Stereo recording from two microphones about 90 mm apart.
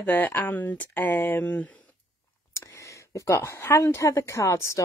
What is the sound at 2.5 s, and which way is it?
Speech, 35° left (ahead or behind).